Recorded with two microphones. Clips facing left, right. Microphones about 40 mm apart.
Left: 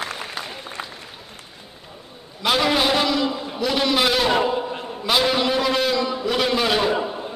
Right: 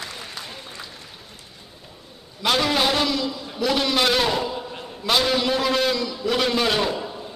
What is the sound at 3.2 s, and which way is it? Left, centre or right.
Speech, left.